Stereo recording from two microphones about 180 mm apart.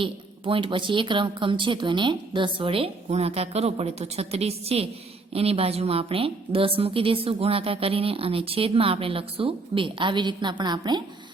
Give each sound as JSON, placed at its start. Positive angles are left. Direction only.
{"t": 0.0, "sound": "a woman's voice", "side_deg": -30}